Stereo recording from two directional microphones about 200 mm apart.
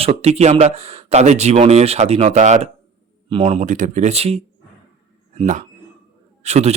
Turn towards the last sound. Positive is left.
turn(degrees=-35)  # may be behind; listen again after turning